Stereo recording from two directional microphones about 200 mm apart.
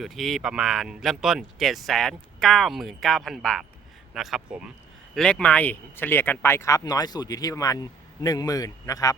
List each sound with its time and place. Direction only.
0.0 s speech: centre (ahead or behind); by 9.1 s 15° left (ahead or behind)